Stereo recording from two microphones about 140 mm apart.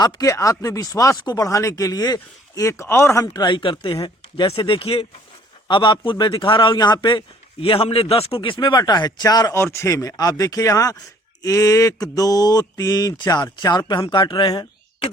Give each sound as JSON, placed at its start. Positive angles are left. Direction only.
{"t": 0.0, "sound": "a man's voice", "side_deg": 25}